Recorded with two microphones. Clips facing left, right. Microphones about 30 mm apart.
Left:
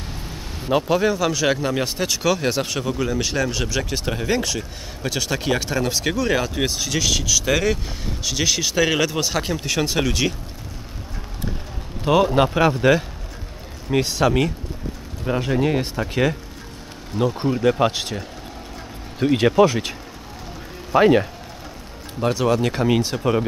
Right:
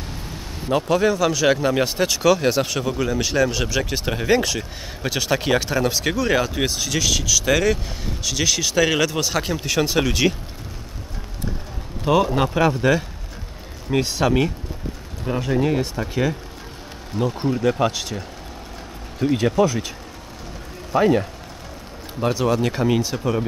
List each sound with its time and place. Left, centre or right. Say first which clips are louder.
0.7 s speech: even; centre
11.4 s a sound: even; left
12.0 s speech: left 2 dB; centre
13.8 s speech: left 1 dB; centre
15.2 s speech: even; centre
17.4 s speech: left 1 dB; centre
19.3 s speech: left 3 dB; left
20.9 s speech: left 3 dB; left
22.2 s speech: left 1 dB; centre